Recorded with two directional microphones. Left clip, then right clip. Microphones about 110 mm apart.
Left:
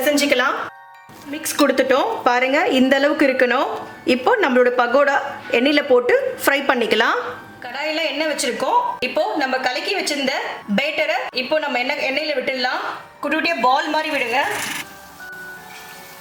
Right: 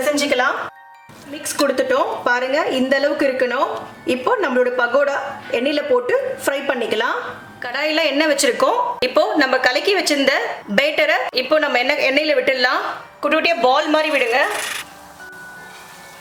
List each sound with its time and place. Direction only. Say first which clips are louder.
0.0 s music: even; 20° left (ahead or behind)
1.3 s a woman's voice: left 1 dB; 25° left (ahead or behind)
7.6 s a woman's voice: right 4 dB; 40° right (ahead or behind)
13.2 s a woman's voice: right 2 dB; 30° right (ahead or behind)